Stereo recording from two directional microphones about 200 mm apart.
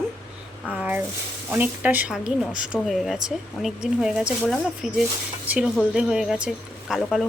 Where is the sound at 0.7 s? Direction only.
5° right (ahead or behind).